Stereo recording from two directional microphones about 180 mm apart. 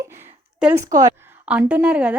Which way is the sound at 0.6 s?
15° right (ahead or behind).